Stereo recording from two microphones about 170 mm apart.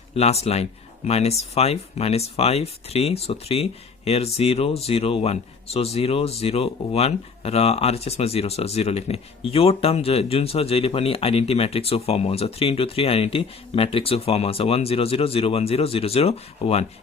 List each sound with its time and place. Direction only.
0.1 s speech: 40° left (ahead or behind)